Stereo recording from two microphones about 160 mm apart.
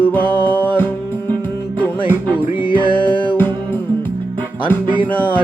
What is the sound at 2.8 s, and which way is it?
Music, 30° left (ahead or behind).